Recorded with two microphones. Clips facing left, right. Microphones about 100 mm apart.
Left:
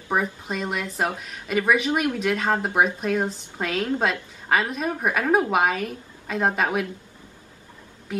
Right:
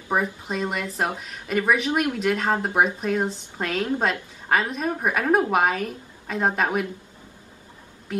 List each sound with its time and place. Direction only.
0.1 s a woman's voice: centre (ahead or behind)